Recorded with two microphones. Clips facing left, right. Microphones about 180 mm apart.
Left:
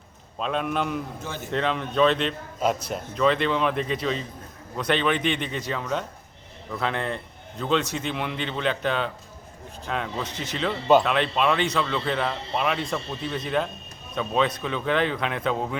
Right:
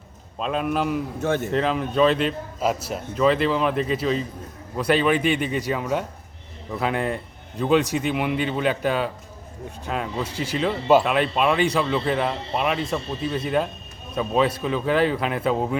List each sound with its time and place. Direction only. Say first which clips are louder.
0.3 s speech: right 2 dB; centre (ahead or behind)
1.2 s a man's voice: right 11 dB; 65° right (ahead or behind)
1.5 s speech: right 3 dB; 5° right (ahead or behind)